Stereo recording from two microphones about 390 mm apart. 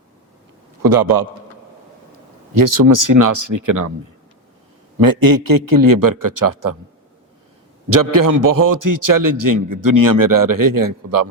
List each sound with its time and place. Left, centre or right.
0.8 s a man's voice: right
2.5 s a man's voice: right
4.9 s a man's voice: right
7.9 s a man's voice: right